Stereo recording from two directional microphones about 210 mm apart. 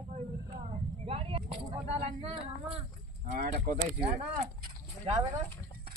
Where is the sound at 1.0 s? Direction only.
25° right (ahead or behind).